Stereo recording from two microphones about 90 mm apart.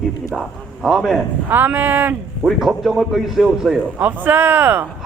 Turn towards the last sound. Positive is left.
turn(degrees=-25)  # may be behind; listen again after turning